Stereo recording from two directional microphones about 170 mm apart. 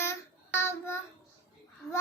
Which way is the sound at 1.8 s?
Centre (ahead or behind).